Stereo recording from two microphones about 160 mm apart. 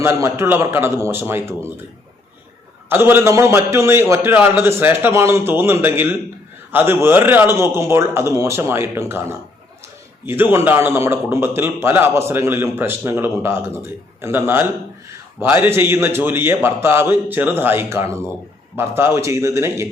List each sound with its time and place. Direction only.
0.0 s a man's voice: 15° right (ahead or behind)
2.9 s a man's voice: 15° right (ahead or behind)